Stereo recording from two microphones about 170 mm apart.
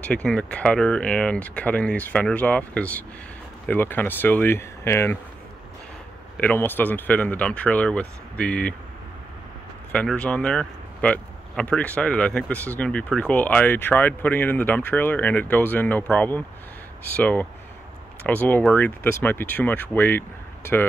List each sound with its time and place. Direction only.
0.0 s speech: 5° left (ahead or behind)
6.3 s speech: 10° left (ahead or behind)
9.9 s speech: 5° left (ahead or behind)